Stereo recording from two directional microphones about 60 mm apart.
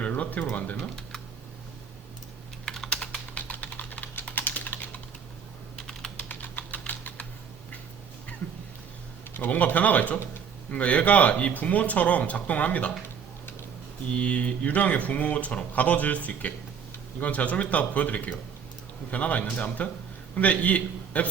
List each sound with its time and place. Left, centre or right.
0.0 s a sound: left
0.8 s speech: centre
2.6 s typing: centre
2.9 s typing: centre
5.7 s typing: centre
6.2 s typing: left
9.3 s speech: left
14.1 s a man's voice: centre